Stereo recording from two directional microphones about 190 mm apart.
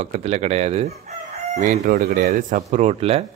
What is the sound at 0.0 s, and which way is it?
Chicken, 35° right (ahead or behind).